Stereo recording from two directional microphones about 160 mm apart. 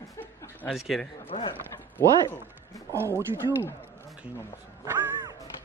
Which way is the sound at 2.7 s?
15° left (ahead or behind).